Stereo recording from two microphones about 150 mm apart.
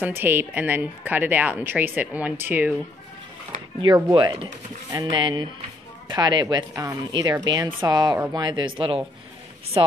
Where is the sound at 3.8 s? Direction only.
30° right (ahead or behind).